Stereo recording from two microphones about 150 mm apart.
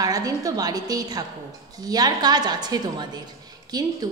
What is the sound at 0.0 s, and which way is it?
A woman's voice, 25° right (ahead or behind).